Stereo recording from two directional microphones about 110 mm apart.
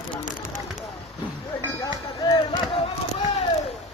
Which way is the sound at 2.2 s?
40° left (ahead or behind).